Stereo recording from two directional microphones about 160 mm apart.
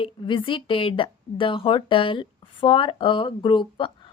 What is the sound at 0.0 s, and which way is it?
Speech, 30° left (ahead or behind).